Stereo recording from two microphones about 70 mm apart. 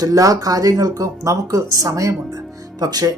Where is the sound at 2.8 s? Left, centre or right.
Right.